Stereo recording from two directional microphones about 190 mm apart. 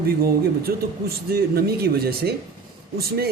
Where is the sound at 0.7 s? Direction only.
55° right (ahead or behind).